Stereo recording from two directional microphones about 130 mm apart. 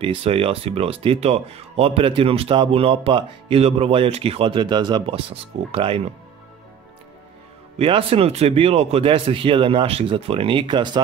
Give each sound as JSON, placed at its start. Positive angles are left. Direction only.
{"t": 0.0, "sound": "speech", "side_deg": -45}
{"t": 7.8, "sound": "speech", "side_deg": -45}